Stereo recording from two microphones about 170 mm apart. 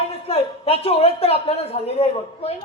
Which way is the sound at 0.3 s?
35° left (ahead or behind).